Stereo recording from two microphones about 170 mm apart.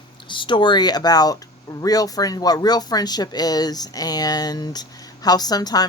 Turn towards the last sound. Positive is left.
turn(degrees=25)  # may be behind; listen again after turning